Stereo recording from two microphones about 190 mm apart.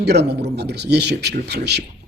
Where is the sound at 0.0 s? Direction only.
60° right (ahead or behind).